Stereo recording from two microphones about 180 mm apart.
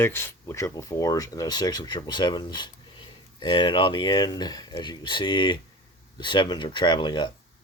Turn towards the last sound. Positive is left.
turn(degrees=25)  # may be behind; listen again after turning